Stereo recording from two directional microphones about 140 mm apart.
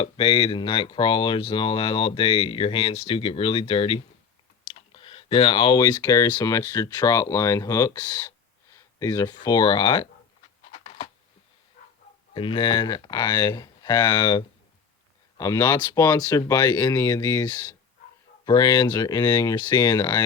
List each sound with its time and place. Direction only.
0.0 s speech: 40° left (ahead or behind)
10.7 s a sound: 45° left (ahead or behind)
12.3 s speech: 40° left (ahead or behind)